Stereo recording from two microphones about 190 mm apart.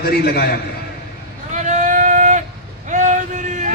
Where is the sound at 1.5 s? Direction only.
40° right (ahead or behind).